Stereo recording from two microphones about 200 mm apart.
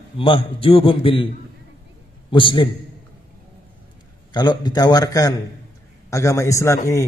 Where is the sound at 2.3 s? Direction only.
25° left (ahead or behind).